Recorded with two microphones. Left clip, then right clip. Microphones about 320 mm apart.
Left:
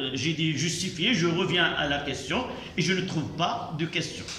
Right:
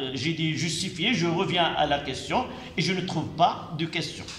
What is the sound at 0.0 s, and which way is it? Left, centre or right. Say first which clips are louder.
A man's voice: even; centre.